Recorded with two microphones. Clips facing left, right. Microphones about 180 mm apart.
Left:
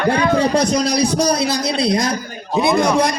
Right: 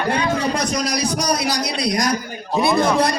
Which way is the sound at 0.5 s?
30° left (ahead or behind).